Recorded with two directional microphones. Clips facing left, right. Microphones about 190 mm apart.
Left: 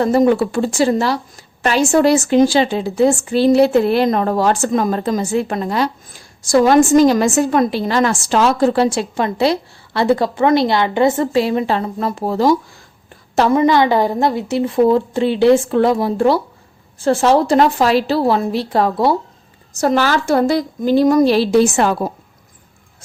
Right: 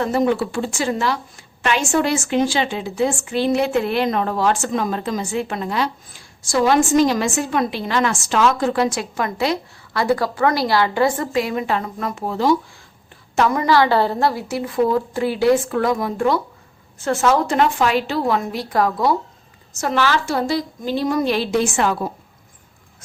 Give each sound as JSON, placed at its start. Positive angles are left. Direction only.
{"t": 0.0, "sound": "a woman's voice", "side_deg": 40}